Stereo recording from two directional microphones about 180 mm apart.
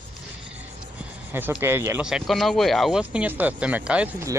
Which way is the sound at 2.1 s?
Centre (ahead or behind).